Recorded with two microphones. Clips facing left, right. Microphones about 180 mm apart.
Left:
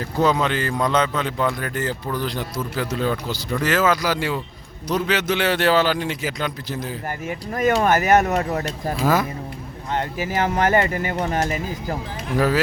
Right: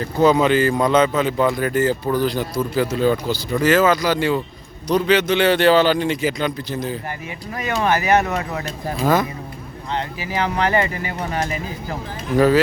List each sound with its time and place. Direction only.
0.0 s speech: centre (ahead or behind)
7.3 s speech: 45° left (ahead or behind)
9.9 s speech: 45° left (ahead or behind)